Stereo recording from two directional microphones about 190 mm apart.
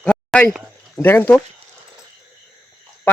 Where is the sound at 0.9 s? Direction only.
10° left (ahead or behind).